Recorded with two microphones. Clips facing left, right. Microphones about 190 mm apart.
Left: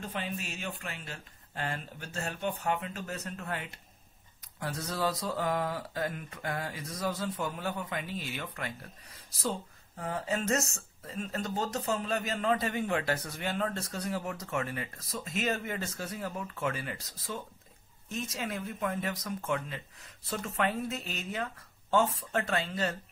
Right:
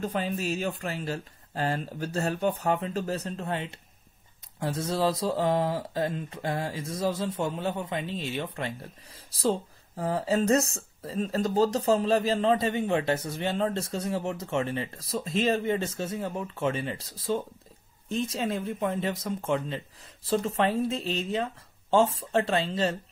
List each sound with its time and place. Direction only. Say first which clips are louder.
0.0 s speech: right 8 dB; 40° right (ahead or behind)